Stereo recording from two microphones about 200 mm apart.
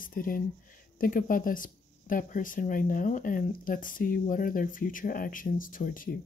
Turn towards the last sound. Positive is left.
turn(degrees=45)  # may be behind; listen again after turning